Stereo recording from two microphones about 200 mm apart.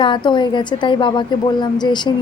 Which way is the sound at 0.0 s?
25° left (ahead or behind).